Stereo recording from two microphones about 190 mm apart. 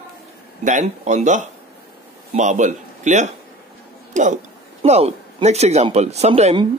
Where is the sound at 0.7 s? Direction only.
40° right (ahead or behind).